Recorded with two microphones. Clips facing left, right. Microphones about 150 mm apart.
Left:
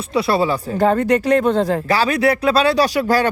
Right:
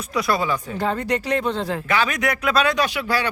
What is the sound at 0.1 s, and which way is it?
Speech, 30° left (ahead or behind).